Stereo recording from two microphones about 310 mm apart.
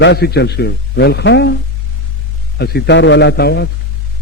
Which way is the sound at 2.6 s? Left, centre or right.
Left.